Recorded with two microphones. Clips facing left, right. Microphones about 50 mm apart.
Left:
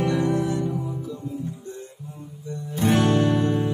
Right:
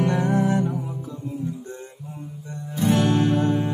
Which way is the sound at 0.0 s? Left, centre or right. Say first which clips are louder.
Right 1 dB; right.